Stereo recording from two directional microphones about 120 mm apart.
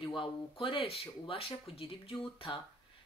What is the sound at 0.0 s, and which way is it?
Speech, 45° left (ahead or behind).